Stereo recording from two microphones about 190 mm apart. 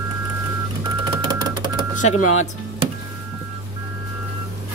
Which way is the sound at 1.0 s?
25° right (ahead or behind).